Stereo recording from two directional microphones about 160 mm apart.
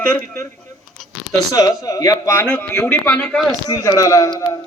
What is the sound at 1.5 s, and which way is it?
Speech, 25° left (ahead or behind).